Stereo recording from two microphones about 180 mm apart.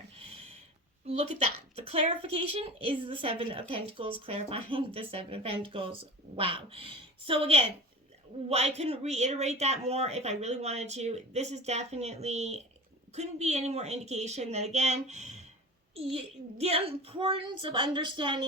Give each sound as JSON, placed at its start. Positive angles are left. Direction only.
{"t": 1.0, "sound": "a child's voice", "side_deg": -35}